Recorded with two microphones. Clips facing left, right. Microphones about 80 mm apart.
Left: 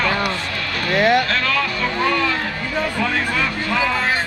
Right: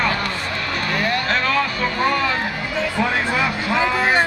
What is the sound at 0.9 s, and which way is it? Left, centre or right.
Music, left.